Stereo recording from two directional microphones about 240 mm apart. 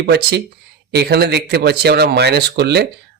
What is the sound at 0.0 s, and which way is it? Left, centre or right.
Speech, right.